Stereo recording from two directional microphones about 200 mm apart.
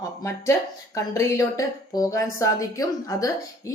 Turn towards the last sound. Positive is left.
turn(degrees=15)  # may be behind; listen again after turning